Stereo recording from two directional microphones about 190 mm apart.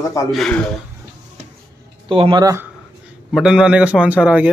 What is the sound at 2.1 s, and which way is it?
Speech, 25° right (ahead or behind).